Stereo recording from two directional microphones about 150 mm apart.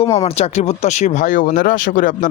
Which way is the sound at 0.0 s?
45° left (ahead or behind).